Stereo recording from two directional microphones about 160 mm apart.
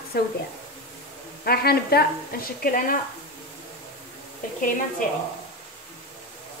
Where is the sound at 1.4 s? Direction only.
75° left (ahead or behind).